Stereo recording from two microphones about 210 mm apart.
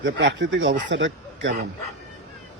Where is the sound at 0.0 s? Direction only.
60° right (ahead or behind).